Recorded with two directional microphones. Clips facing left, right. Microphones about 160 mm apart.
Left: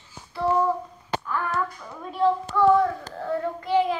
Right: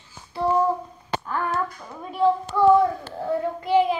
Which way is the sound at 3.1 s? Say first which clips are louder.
Right 2 dB; 15° right (ahead or behind).